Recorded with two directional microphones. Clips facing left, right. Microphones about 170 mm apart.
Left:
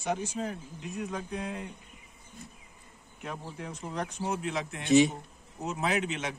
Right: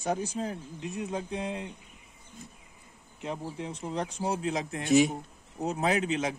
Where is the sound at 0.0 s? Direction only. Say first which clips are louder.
Right 1 dB; 35° right (ahead or behind).